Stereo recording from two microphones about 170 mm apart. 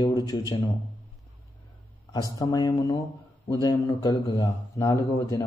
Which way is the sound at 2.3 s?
25° left (ahead or behind).